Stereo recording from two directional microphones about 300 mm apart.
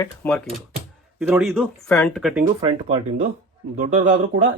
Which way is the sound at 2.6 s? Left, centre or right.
Centre.